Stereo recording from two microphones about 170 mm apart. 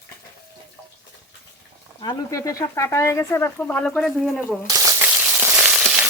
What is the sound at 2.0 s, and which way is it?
Speech, 20° left (ahead or behind).